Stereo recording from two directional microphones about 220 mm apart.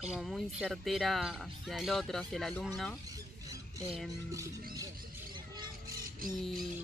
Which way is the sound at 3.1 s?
15° right (ahead or behind).